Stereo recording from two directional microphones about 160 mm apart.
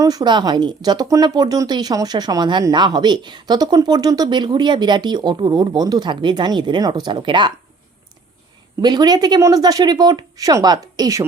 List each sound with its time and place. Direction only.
0.0 s speech: 25° right (ahead or behind)
8.8 s speech: 25° right (ahead or behind)